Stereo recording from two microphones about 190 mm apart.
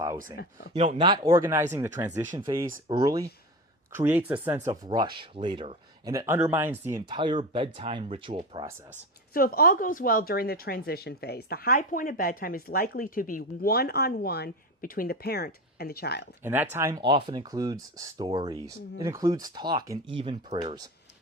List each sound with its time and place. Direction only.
0.7 s speech: 35° right (ahead or behind)
0.9 s speech: 25° right (ahead or behind)
6.1 s speech: 15° right (ahead or behind)
9.3 s a woman's voice: 50° left (ahead or behind)
16.4 s speech: 10° right (ahead or behind)